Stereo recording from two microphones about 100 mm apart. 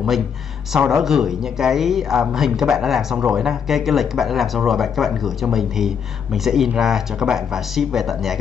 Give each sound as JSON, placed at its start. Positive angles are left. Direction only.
{"t": 0.7, "sound": "speech", "side_deg": -5}